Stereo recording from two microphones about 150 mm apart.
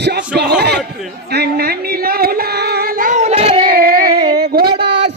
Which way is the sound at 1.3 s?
90° right.